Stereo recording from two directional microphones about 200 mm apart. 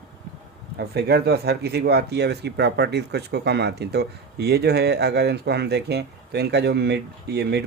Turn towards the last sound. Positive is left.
turn(degrees=-55)  # may be behind; listen again after turning